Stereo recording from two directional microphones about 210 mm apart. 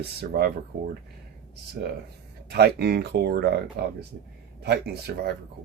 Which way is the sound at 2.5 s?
50° right (ahead or behind).